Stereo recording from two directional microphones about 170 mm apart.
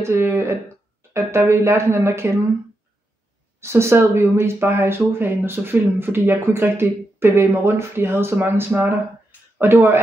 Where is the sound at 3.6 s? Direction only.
15° right (ahead or behind).